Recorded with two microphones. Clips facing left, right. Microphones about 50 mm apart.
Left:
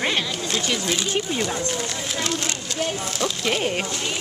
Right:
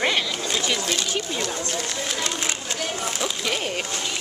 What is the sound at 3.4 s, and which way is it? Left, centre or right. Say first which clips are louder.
Speech: left 5 dB; centre.